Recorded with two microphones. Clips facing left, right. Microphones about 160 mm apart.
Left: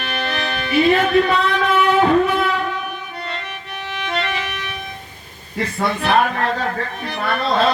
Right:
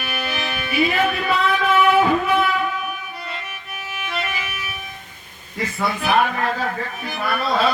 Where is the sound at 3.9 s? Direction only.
5° right (ahead or behind).